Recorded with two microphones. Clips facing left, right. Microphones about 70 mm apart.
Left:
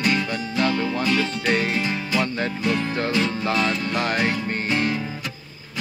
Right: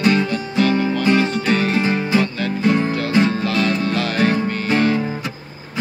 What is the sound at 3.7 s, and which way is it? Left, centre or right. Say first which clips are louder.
Music: right 5 dB; right.